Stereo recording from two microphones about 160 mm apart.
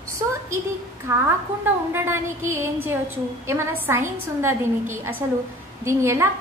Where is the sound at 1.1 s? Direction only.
15° right (ahead or behind).